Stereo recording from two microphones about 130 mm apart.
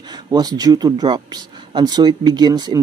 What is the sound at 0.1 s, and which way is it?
Speech, 30° right (ahead or behind).